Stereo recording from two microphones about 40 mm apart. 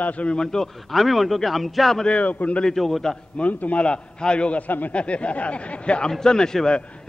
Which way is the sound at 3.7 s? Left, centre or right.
Left.